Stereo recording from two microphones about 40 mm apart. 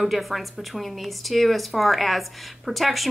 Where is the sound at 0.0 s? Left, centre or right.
Centre.